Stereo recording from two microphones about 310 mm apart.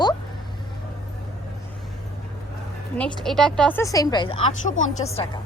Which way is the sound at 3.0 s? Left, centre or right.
Centre.